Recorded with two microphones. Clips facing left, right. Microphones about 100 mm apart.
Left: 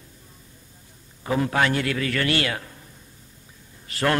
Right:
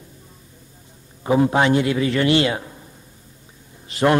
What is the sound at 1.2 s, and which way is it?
A man's voice, 20° right (ahead or behind).